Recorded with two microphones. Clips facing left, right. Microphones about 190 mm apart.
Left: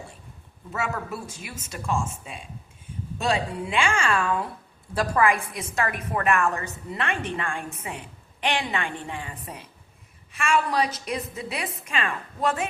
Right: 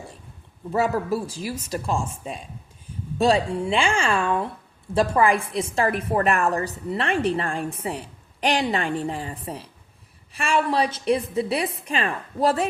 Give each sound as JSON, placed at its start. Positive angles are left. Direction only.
{"t": 0.7, "sound": "a woman's voice", "side_deg": -35}